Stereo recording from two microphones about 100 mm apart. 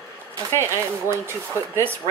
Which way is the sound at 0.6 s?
25° right (ahead or behind).